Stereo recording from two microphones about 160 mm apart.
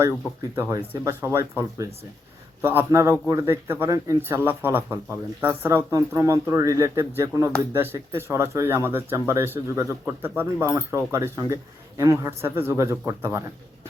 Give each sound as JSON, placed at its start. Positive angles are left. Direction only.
{"t": 0.5, "sound": "a man's voice", "side_deg": -15}